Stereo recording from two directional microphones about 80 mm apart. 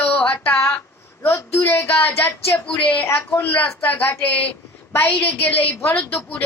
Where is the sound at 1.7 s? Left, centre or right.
Left.